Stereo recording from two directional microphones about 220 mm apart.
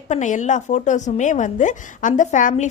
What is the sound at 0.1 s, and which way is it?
A woman's voice, 35° left (ahead or behind).